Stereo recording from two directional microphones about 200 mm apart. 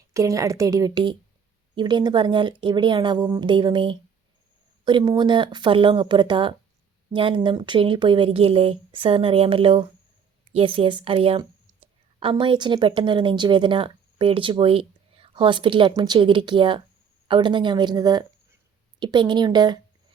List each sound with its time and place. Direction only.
0.1 s speech: 15° right (ahead or behind)